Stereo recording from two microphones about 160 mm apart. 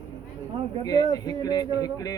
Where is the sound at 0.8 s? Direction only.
25° left (ahead or behind).